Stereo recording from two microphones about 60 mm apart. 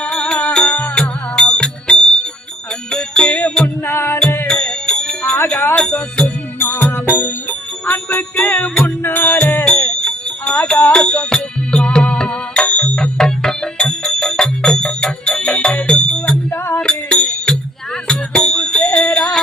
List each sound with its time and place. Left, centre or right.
0.0 s music: centre
3.8 s music: left
4.4 s music: centre
6.6 s jingle bell: left
8.8 s music: left
9.6 s music: centre
16.5 s music: left
16.8 s music: centre
18.9 s jingle bell: centre